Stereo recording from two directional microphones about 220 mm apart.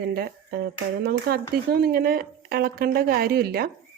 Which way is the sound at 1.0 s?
45° right (ahead or behind).